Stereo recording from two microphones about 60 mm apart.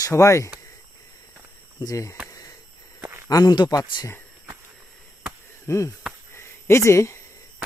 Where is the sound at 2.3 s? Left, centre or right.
Left.